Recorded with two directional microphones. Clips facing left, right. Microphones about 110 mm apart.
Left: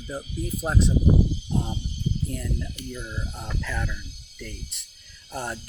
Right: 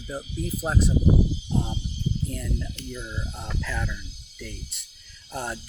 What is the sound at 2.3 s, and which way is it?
Speech, centre (ahead or behind).